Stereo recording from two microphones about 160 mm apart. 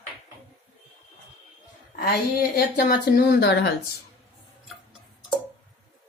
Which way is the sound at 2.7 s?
75° left (ahead or behind).